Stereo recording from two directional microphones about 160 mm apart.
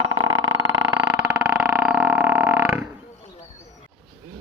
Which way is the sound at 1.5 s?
5° right (ahead or behind).